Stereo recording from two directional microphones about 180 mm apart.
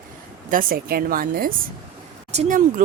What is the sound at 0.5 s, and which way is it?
A woman's voice, 55° right (ahead or behind).